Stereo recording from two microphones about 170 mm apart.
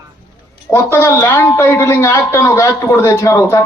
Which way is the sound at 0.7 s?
15° left (ahead or behind).